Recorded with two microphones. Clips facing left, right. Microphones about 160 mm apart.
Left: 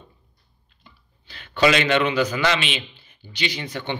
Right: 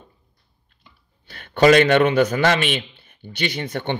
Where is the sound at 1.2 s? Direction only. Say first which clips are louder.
Right 5 dB; 50° right (ahead or behind).